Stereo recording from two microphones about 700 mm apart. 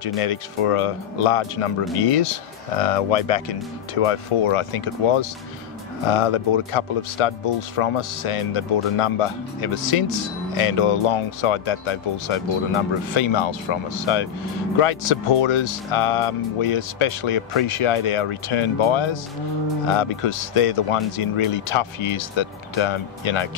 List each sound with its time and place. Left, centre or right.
0.2 s speech: left